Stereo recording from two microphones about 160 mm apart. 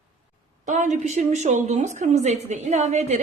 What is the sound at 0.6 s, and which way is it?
A woman's voice, 50° right (ahead or behind).